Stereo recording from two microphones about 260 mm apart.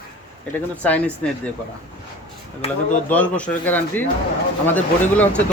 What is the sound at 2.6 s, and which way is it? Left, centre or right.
Speech, left.